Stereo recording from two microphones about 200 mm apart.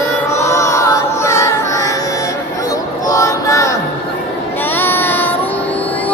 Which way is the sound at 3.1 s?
15° left (ahead or behind).